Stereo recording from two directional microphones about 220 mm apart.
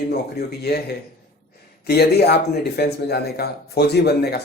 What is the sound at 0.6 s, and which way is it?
Speech, 45° left (ahead or behind).